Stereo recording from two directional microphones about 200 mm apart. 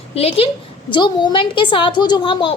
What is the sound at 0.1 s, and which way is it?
A woman's voice, 30° left (ahead or behind).